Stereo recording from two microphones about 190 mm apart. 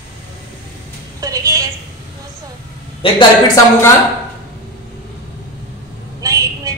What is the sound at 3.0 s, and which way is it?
Speech, 25° left (ahead or behind).